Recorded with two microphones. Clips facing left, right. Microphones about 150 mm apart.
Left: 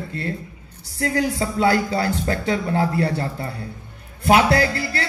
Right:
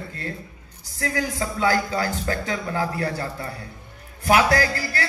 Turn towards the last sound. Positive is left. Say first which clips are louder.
# left 2 dB
turn(degrees=30)  # may be behind; listen again after turning